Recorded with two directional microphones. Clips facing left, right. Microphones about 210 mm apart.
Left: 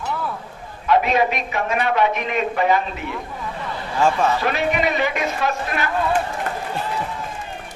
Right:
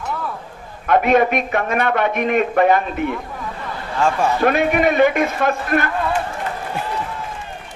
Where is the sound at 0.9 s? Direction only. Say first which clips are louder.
Right 3 dB; 55° right (ahead or behind).